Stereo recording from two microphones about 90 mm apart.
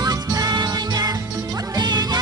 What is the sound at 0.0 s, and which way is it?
Music, 45° right (ahead or behind).